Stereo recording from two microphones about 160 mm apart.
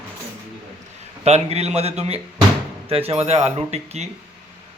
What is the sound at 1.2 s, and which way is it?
Speech, 40° right (ahead or behind).